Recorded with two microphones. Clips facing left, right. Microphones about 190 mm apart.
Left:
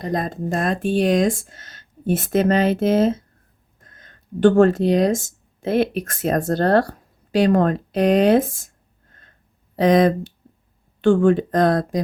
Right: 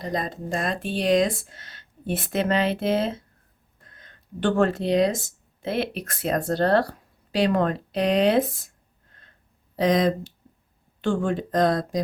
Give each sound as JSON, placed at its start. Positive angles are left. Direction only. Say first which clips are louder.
{"t": 0.0, "sound": "speech", "louder": "left 5 dB", "side_deg": 50}
{"t": 9.7, "sound": "speech", "louder": "left 5 dB", "side_deg": 60}